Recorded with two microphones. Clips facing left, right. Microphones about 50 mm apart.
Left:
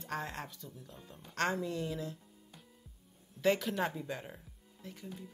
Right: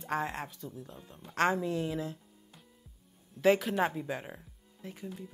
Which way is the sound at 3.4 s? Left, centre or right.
Centre.